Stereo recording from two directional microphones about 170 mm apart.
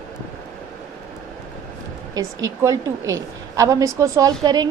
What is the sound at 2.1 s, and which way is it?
A woman's voice, 20° right (ahead or behind).